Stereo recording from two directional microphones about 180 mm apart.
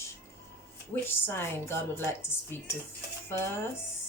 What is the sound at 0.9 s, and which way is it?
A woman's voice, 10° left (ahead or behind).